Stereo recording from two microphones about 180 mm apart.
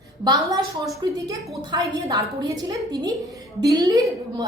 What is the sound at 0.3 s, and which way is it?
A woman's voice, 20° right (ahead or behind).